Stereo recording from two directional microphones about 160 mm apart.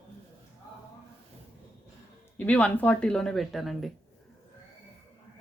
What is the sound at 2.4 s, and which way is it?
Speech, 10° left (ahead or behind).